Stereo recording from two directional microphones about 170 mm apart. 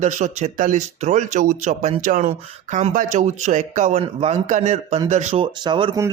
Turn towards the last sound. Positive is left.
turn(degrees=-30)  # may be behind; listen again after turning